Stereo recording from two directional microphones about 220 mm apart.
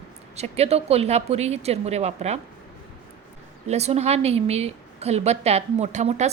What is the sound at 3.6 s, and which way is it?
A woman's voice, 30° right (ahead or behind).